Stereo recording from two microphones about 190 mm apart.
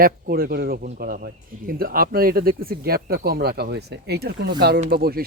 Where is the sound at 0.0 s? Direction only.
50° right (ahead or behind).